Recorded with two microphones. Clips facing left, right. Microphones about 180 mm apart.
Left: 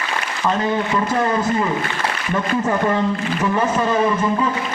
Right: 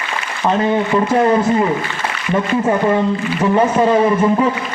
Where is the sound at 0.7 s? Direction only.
25° right (ahead or behind).